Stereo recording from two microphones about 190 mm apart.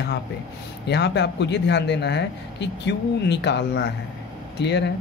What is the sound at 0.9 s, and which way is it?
Speech, 65° left (ahead or behind).